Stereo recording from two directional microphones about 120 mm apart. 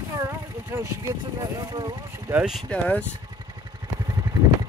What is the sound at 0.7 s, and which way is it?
Speech, 25° right (ahead or behind).